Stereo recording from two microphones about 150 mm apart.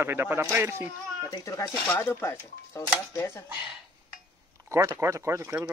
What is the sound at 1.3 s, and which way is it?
Speech, 20° left (ahead or behind).